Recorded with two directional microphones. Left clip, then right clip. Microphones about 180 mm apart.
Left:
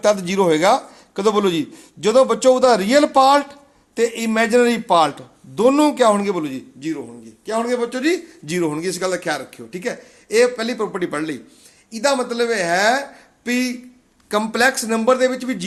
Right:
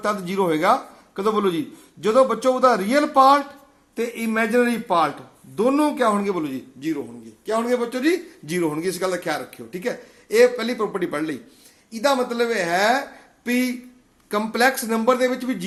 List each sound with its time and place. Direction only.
0.0 s a man's voice: 50° left (ahead or behind)